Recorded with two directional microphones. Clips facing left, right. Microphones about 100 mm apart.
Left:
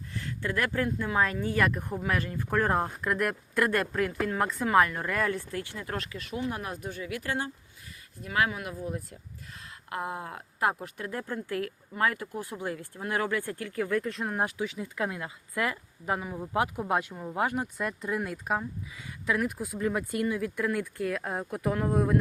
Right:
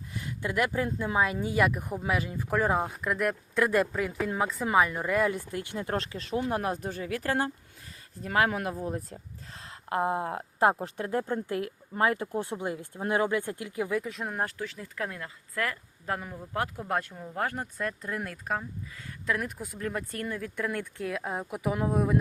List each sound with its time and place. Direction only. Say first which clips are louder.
0.1 s a sound: even; 15° right (ahead or behind)
0.9 s speech: even; 20° right (ahead or behind)
5.7 s speech: right 4 dB; 30° right (ahead or behind); by 14.4 s centre (ahead or behind)
14.4 s speech: left 3 dB; 10° left (ahead or behind)